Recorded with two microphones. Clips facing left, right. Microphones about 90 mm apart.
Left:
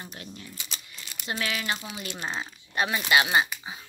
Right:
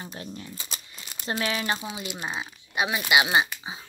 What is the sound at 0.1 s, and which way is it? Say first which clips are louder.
Speech: right 4 dB; 30° right (ahead or behind).